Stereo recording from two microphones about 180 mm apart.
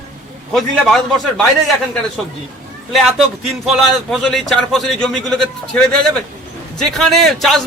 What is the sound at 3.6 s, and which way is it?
A man's voice, centre (ahead or behind).